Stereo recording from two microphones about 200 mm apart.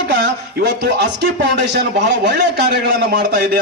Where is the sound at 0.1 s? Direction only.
60° right (ahead or behind).